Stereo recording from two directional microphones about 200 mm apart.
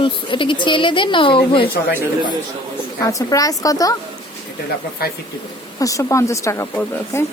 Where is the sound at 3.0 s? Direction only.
15° left (ahead or behind).